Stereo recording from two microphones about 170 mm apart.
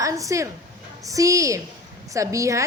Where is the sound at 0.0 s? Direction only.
20° right (ahead or behind).